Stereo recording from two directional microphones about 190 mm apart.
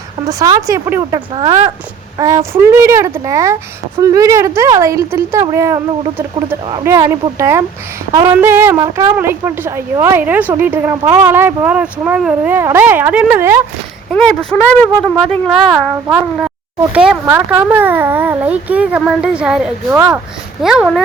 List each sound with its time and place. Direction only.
0.3 s speech: 20° right (ahead or behind)
14.1 s a woman's voice: 5° left (ahead or behind)